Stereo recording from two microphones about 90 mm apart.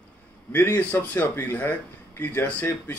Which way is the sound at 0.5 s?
20° left (ahead or behind).